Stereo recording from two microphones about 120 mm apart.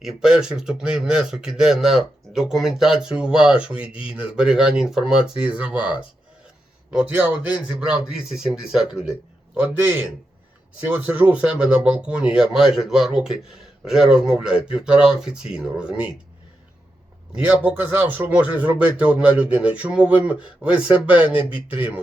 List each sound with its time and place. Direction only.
0.0 s speech: 5° right (ahead or behind)
7.1 s speech: 15° right (ahead or behind)
17.3 s speech: 15° right (ahead or behind)